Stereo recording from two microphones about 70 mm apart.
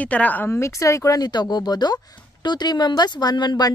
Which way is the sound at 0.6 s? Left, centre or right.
Left.